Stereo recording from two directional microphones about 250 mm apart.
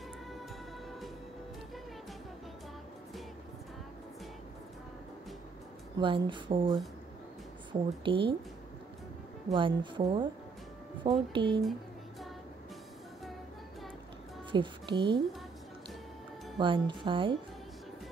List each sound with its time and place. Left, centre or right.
5.9 s speech: centre
8.0 s speech: centre
9.5 s speech: centre
14.5 s speech: centre
16.5 s speech: centre